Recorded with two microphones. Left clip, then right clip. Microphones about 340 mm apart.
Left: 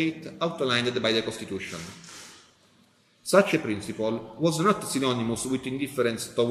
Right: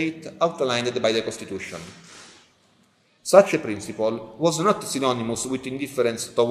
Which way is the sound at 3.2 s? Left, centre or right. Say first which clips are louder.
Right 6 dB; centre.